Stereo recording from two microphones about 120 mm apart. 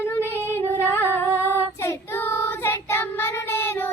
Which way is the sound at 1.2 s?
20° right (ahead or behind).